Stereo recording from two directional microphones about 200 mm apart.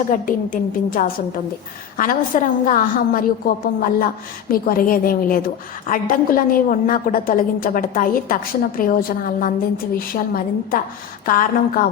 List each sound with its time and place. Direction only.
0.1 s a woman's voice: 45° left (ahead or behind)